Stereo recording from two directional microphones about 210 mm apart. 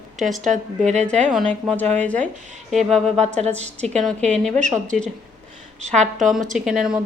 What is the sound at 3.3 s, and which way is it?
Speech, 30° right (ahead or behind).